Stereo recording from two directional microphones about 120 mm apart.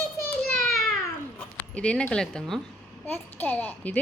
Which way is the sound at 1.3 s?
10° left (ahead or behind).